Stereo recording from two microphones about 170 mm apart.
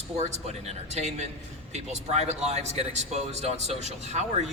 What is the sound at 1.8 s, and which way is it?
A man's voice, 40° right (ahead or behind).